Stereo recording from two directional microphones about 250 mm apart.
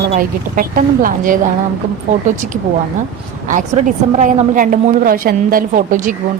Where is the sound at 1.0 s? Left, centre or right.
Right.